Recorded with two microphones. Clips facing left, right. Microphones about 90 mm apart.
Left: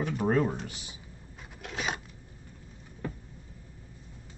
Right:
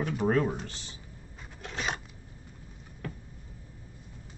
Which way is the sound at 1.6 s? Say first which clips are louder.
Even; 5° left (ahead or behind).